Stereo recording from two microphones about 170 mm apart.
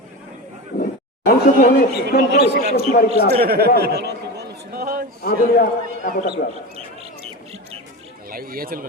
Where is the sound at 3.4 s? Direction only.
65° right (ahead or behind).